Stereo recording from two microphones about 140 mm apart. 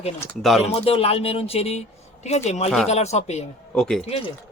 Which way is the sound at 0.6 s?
45° left (ahead or behind).